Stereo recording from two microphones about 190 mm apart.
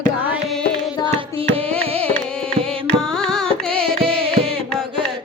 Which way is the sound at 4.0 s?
30° right (ahead or behind).